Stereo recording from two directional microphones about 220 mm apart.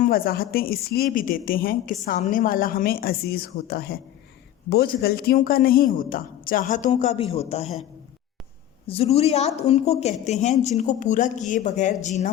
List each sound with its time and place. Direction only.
0.0 s speech: 40° left (ahead or behind)
8.9 s a woman's voice: 25° left (ahead or behind)